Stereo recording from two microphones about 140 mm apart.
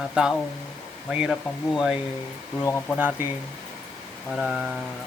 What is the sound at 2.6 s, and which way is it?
Speech, 15° left (ahead or behind).